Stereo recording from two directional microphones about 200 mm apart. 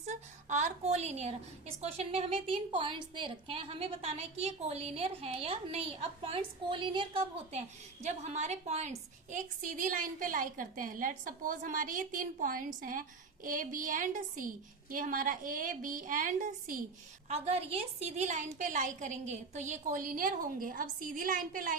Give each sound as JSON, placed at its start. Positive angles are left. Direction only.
{"t": 0.0, "sound": "a woman's voice", "side_deg": -35}